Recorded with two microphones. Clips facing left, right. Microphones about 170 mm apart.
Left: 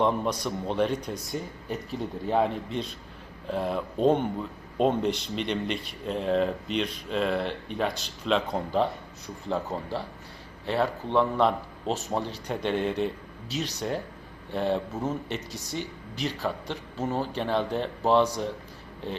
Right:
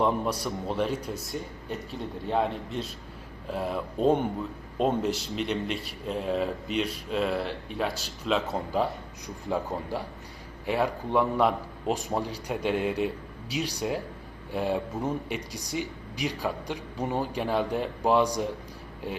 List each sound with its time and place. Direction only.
0.0 s speech: 5° right (ahead or behind)